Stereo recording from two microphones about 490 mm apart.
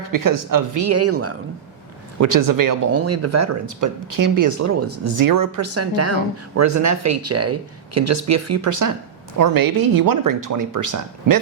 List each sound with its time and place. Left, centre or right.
0.1 s speech: right
2.1 s speech: right